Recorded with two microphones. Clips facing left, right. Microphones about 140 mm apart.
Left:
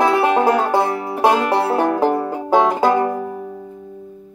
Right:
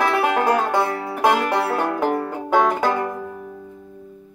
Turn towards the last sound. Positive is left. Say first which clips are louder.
# left 4 dB
turn(degrees=25)  # may be behind; listen again after turning